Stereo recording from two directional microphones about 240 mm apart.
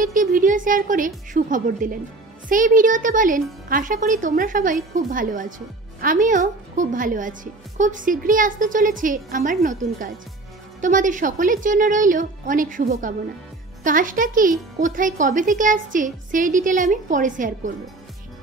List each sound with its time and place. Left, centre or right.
0.0 s a woman's voice: right